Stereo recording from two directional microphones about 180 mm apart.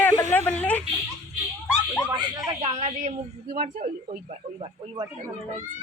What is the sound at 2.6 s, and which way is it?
Speech, 35° right (ahead or behind).